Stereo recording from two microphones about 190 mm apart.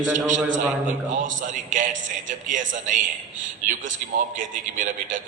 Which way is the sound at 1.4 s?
45° right (ahead or behind).